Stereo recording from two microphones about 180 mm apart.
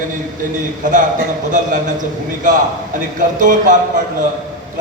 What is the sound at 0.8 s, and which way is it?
Speech, 45° right (ahead or behind).